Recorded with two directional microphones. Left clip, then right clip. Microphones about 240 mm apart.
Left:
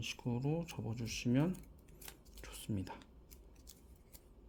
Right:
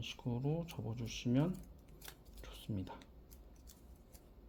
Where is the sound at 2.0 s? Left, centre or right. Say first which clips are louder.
Left 1 dB; centre.